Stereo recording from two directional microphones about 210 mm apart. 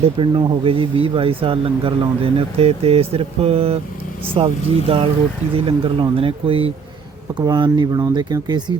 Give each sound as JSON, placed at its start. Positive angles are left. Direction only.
{"t": 0.0, "sound": "speech", "side_deg": -25}